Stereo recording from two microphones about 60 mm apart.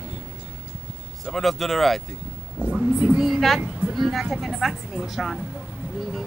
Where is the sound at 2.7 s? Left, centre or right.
Centre.